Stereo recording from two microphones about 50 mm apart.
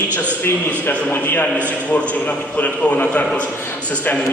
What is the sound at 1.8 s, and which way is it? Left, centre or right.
A man's voice, left.